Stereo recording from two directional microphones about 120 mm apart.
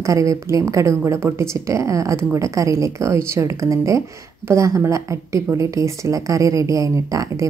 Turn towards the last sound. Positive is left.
turn(degrees=-25)  # may be behind; listen again after turning